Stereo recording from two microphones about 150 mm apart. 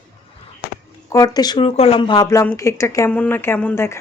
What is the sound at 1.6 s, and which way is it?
Speech, 40° left (ahead or behind).